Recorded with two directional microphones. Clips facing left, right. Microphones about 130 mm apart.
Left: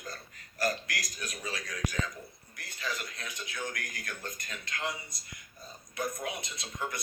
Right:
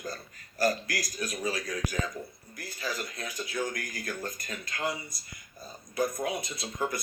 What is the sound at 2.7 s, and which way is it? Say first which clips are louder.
Speech: right 3 dB; 35° right (ahead or behind).